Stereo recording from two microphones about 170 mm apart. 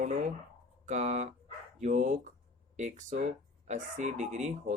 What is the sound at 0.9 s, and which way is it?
Speech, 45° right (ahead or behind).